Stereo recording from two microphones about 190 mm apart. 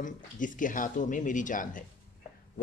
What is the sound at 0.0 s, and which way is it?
Speech, 45° left (ahead or behind).